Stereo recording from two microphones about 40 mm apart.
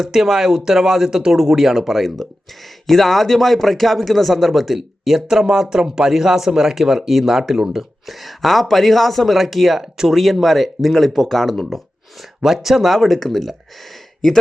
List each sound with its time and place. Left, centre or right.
0.0 s speech: centre